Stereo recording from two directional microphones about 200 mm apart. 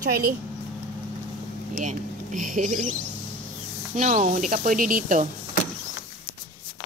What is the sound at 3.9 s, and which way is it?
Speech, 35° right (ahead or behind).